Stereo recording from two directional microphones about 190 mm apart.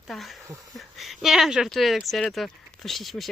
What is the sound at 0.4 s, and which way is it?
Speech, 15° right (ahead or behind).